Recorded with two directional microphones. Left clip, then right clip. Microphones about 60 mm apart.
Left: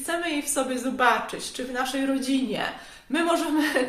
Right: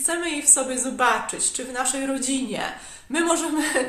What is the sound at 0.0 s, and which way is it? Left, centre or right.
Speech, right.